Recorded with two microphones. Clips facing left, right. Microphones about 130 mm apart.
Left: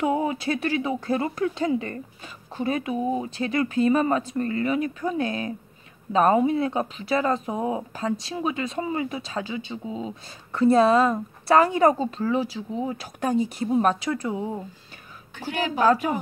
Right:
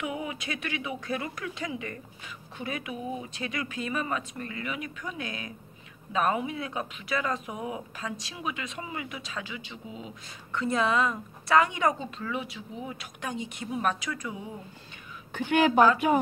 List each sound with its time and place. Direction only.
0.0 s speech: 40° left (ahead or behind)
15.5 s speech: 70° right (ahead or behind)
15.8 s speech: 35° left (ahead or behind)